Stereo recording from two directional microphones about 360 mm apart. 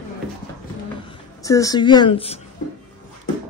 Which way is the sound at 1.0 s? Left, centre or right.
Centre.